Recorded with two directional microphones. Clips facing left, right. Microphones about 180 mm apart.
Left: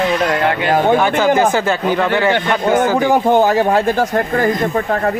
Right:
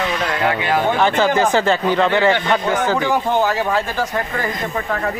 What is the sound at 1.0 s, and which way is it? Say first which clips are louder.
Speech: left 2 dB; 10° left (ahead or behind).